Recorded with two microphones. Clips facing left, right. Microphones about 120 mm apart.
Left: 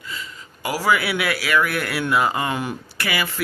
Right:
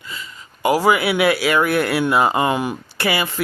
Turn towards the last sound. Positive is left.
turn(degrees=-25)  # may be behind; listen again after turning